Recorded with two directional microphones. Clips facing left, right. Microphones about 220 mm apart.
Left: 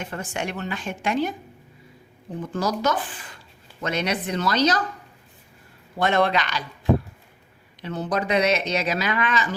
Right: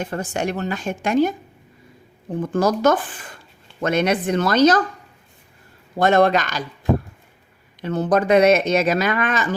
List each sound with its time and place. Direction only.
0.0 s a woman's voice: 40° right (ahead or behind)
2.4 s speech: 50° right (ahead or behind)
6.0 s speech: 45° right (ahead or behind)
7.8 s speech: 50° right (ahead or behind)